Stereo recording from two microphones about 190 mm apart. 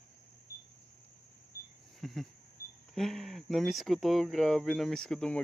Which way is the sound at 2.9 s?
Centre (ahead or behind).